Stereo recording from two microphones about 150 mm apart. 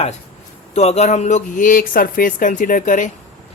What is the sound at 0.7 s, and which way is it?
Speech, 45° left (ahead or behind).